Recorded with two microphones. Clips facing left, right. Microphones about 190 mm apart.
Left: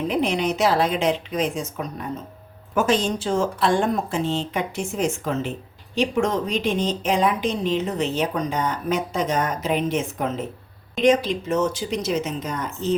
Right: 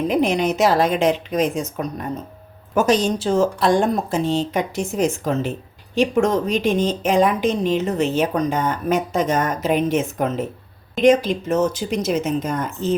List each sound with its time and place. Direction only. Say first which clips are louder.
0.1 s a woman's voice: right 3 dB; 45° right (ahead or behind)
2.7 s a woman's voice: right 3 dB; 40° right (ahead or behind)